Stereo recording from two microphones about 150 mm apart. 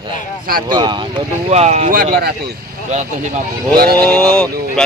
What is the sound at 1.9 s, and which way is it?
Speech, 75° right (ahead or behind).